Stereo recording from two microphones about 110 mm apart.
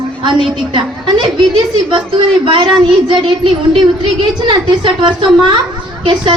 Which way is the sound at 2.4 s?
45° right (ahead or behind).